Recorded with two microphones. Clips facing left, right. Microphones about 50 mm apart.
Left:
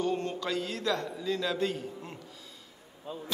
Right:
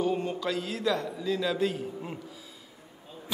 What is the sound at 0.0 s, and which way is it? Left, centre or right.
A man's voice, centre.